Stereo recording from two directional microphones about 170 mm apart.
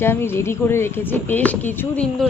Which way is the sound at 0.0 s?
15° left (ahead or behind).